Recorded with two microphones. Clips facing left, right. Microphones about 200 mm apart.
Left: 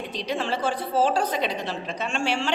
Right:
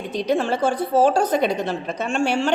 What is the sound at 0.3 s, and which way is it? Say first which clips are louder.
A woman's voice: right 6 dB; 45° right (ahead or behind).